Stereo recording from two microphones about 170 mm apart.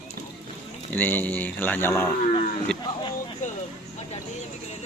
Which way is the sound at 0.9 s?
10° left (ahead or behind).